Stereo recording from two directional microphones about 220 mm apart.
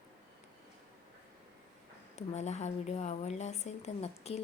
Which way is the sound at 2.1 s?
30° left (ahead or behind).